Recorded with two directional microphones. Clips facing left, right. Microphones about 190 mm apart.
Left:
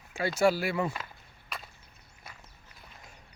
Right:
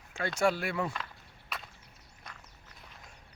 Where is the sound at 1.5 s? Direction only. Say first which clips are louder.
Even; centre (ahead or behind).